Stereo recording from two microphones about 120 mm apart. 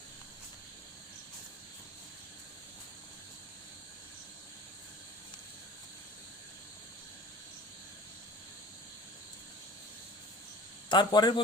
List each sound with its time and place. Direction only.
10.8 s a man's voice: 40° left (ahead or behind)